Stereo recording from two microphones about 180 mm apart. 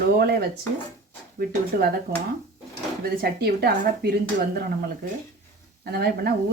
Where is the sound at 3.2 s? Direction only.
60° right (ahead or behind).